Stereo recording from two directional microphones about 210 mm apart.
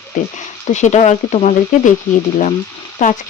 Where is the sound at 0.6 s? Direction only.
35° left (ahead or behind).